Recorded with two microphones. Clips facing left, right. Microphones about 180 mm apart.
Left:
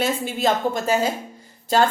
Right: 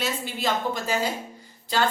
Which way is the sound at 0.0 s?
45° left (ahead or behind).